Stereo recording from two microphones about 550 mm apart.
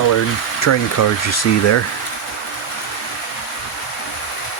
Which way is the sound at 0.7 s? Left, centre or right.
Left.